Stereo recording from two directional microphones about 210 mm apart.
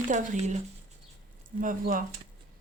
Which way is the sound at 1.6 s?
40° right (ahead or behind).